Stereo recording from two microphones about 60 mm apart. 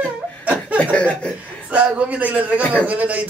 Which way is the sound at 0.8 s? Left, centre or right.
Centre.